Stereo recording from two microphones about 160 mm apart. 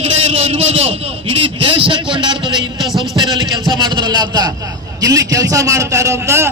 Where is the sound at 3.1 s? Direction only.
25° right (ahead or behind).